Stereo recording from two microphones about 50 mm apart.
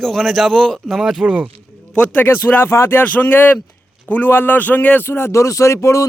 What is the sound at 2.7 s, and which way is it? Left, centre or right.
Speech, left.